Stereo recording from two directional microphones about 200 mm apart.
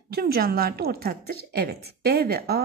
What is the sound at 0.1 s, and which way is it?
A woman's voice, 50° right (ahead or behind).